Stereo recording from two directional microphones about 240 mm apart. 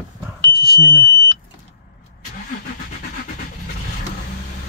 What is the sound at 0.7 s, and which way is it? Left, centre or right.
Smoke detector, centre.